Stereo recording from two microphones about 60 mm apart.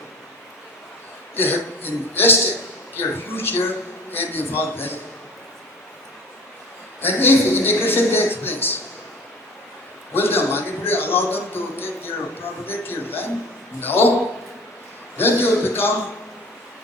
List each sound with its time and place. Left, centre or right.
1.4 s a man's voice: left
7.0 s a man's voice: left
10.2 s a man's voice: left
15.2 s a man's voice: left